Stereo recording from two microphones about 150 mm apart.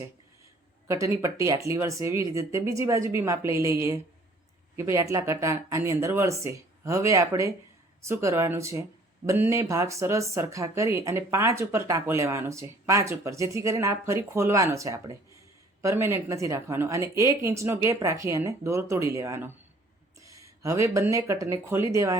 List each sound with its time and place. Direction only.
0.9 s speech: 20° right (ahead or behind)